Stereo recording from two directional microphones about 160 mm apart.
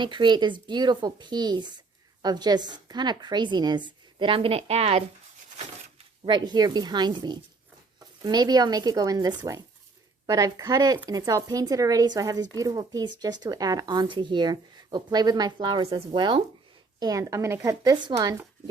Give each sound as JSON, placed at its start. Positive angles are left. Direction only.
{"t": 0.0, "sound": "speech", "side_deg": -30}
{"t": 6.2, "sound": "speech", "side_deg": -25}